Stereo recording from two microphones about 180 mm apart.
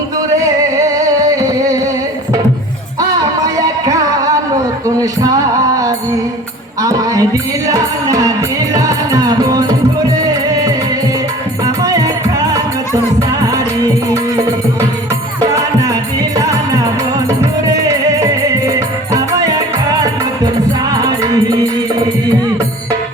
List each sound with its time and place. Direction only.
0.3 s music: 20° right (ahead or behind)
3.0 s music: 20° right (ahead or behind)
15.5 s music: 20° right (ahead or behind)
18.2 s music: 20° right (ahead or behind)